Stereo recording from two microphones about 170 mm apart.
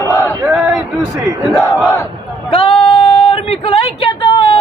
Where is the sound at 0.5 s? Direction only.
5° right (ahead or behind).